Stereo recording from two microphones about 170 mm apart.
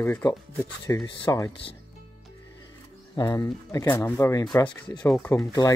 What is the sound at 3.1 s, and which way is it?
Speech, 20° left (ahead or behind).